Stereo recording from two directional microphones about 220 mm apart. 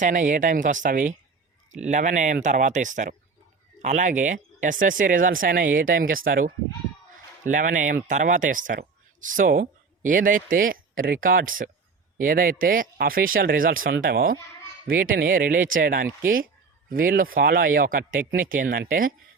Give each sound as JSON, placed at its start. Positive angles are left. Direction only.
{"t": 0.0, "sound": "speech", "side_deg": -35}